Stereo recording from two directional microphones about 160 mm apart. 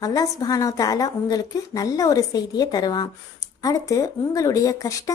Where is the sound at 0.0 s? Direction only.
20° left (ahead or behind).